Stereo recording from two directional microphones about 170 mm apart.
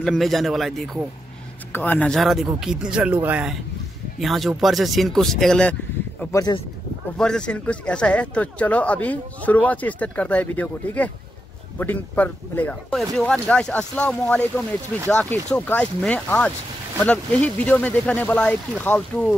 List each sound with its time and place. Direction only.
0.0 s speech: centre (ahead or behind)
6.3 s speech: 25° left (ahead or behind)
7.2 s speech: 5° left (ahead or behind)